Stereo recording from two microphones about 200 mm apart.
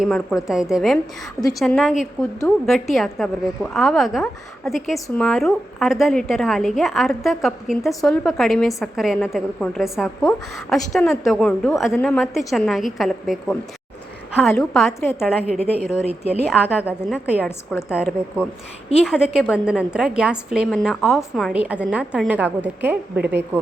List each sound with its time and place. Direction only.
0.0 s a woman's voice: centre (ahead or behind)
4.9 s a woman's voice: 10° left (ahead or behind)
15.7 s speech: 30° left (ahead or behind)
16.6 s a woman's voice: 10° left (ahead or behind)
16.8 s a woman's voice: 5° right (ahead or behind)